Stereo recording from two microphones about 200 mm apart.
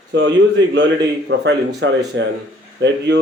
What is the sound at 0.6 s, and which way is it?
Speech, 65° right (ahead or behind).